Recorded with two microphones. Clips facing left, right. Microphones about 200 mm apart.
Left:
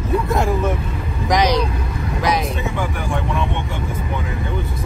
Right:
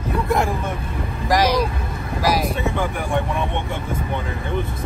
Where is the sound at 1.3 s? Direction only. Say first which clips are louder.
Left 1 dB; 5° right (ahead or behind).